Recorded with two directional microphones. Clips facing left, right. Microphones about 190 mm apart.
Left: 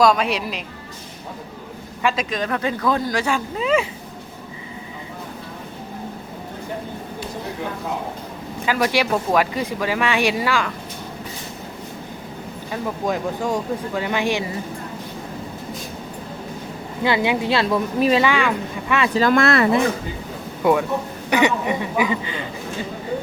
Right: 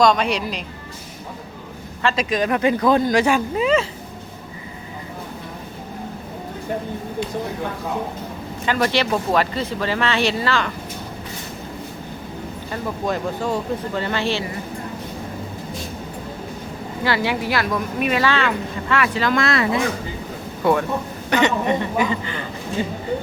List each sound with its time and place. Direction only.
0.0 s a woman's voice: 5° left (ahead or behind)
2.1 s speech: 10° right (ahead or behind)
3.3 s a woman's voice: 5° right (ahead or behind)
8.6 s speech: 5° left (ahead or behind)
12.7 s speech: 10° left (ahead or behind)
17.0 s speech: 20° left (ahead or behind)
18.3 s speech: 15° left (ahead or behind)
19.1 s speech: 45° left (ahead or behind)
20.6 s speech: 15° left (ahead or behind)